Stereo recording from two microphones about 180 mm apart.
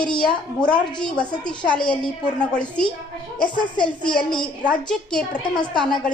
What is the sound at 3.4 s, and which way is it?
Speech, 25° left (ahead or behind).